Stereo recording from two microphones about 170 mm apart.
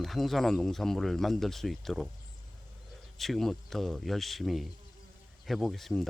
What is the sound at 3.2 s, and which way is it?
Speech, centre (ahead or behind).